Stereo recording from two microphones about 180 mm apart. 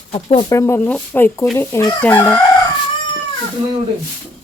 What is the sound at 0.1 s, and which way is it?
Speech, 35° left (ahead or behind).